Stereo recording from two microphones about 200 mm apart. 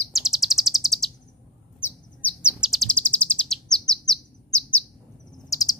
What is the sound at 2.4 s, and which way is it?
Chirp, 5° right (ahead or behind).